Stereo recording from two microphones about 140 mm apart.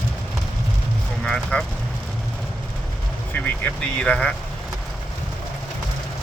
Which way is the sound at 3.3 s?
10° left (ahead or behind).